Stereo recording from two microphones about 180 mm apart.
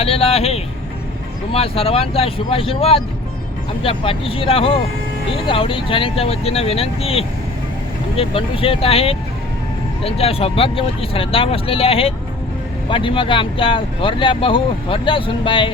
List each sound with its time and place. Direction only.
0.0 s vehicle: 35° left (ahead or behind)
1.5 s speech: 30° left (ahead or behind)